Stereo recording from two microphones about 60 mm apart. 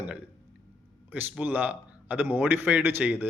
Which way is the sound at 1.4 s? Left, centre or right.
Right.